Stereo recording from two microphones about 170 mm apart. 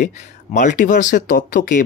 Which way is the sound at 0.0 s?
45° left (ahead or behind).